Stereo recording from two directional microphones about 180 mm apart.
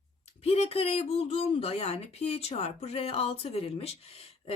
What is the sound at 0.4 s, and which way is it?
Speech, 35° left (ahead or behind).